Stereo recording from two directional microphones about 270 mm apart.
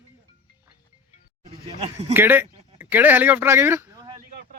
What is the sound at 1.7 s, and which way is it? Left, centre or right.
Speech, right.